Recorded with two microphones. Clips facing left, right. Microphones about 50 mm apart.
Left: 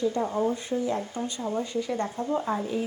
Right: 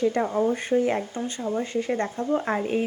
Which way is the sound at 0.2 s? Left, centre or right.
Right.